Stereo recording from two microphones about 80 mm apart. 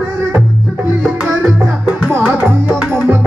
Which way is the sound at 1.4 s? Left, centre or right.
Centre.